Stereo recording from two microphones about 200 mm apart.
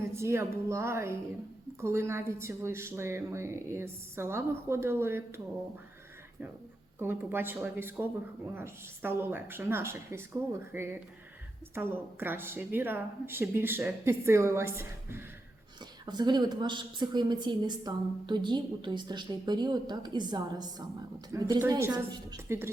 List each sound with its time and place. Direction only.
0.0 s a woman's voice: 15° right (ahead or behind)
7.0 s a woman's voice: 10° right (ahead or behind)